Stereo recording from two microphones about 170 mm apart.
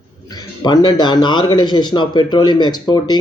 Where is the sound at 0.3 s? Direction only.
25° left (ahead or behind).